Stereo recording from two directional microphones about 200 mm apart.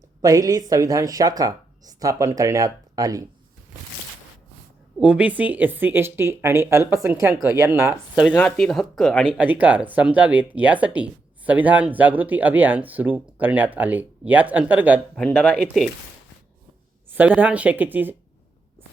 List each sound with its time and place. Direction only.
0.2 s speech: 15° right (ahead or behind)
4.9 s speech: 5° right (ahead or behind)
15.2 s speech: 5° left (ahead or behind)
17.1 s speech: 10° right (ahead or behind)